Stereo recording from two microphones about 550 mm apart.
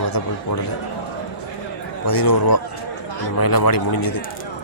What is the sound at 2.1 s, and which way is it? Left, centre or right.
Speech, left.